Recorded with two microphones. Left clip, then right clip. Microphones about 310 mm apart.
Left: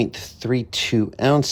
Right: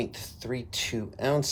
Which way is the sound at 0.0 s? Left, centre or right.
Left.